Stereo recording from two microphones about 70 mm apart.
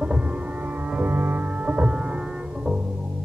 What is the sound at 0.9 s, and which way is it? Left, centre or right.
Music, right.